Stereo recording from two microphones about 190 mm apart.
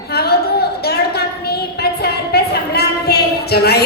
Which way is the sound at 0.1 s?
55° left (ahead or behind).